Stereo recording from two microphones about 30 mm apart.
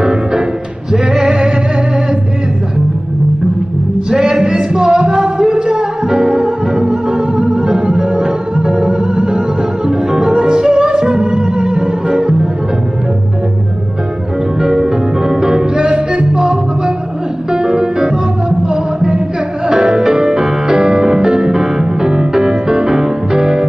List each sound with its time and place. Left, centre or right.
1.2 s music: right
4.8 s music: right
5.1 s music: right
12.1 s music: right
14.8 s music: right
17.6 s music: right
18.9 s music: right
20.1 s music: right
20.7 s music: right
22.8 s music: centre
23.3 s music: right